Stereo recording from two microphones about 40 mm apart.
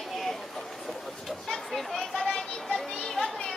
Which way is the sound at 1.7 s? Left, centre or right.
Centre.